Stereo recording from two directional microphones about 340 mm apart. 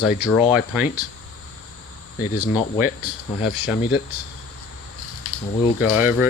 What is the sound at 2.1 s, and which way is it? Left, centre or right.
Speech, left.